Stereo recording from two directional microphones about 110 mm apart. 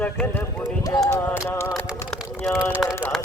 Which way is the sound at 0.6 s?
35° left (ahead or behind).